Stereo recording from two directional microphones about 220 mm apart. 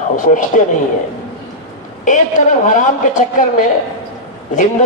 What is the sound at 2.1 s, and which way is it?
A man's voice, 35° left (ahead or behind).